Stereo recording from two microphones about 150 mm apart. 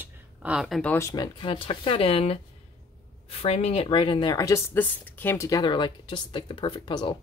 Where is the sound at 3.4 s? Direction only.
40° left (ahead or behind).